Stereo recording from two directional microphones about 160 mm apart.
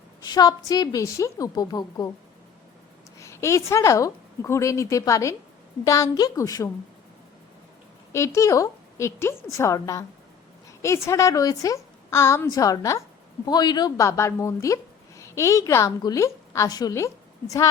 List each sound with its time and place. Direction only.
0.2 s a woman's voice: 25° left (ahead or behind)
3.2 s a woman's voice: 20° left (ahead or behind)
8.1 s a woman's voice: 20° left (ahead or behind)